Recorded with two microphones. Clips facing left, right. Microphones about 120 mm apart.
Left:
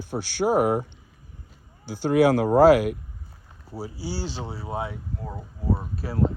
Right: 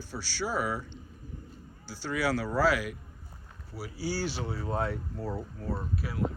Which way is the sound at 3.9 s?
15° left (ahead or behind).